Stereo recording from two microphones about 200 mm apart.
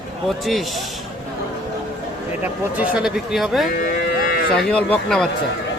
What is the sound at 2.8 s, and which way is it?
Speech, 5° right (ahead or behind).